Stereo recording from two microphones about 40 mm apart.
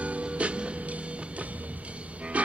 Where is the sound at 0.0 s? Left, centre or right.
Right.